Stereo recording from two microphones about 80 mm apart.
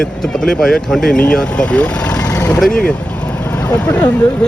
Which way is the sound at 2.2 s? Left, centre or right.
Left.